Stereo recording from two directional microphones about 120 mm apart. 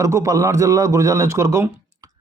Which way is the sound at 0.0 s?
25° right (ahead or behind).